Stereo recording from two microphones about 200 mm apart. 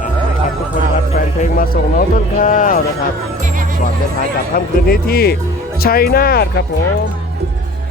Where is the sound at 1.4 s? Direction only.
45° left (ahead or behind).